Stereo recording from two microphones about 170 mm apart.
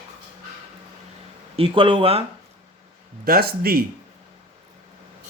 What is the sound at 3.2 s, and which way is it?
Speech, 60° right (ahead or behind).